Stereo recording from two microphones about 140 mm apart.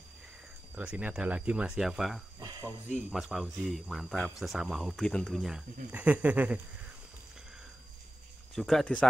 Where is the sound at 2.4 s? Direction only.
25° right (ahead or behind).